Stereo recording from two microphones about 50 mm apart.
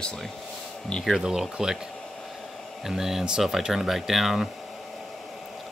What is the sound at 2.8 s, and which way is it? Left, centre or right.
Speech, centre.